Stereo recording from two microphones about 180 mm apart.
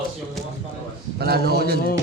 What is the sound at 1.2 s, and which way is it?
Speech, 60° right (ahead or behind).